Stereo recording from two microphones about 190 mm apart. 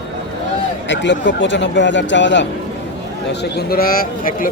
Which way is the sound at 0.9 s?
70° left (ahead or behind).